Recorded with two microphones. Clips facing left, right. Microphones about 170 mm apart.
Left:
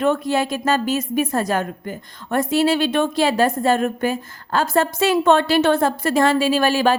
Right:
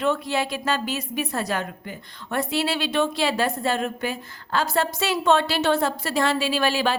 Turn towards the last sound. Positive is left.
turn(degrees=45)  # may be behind; listen again after turning